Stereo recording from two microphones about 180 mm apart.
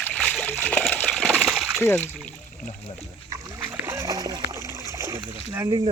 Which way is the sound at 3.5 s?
15° right (ahead or behind).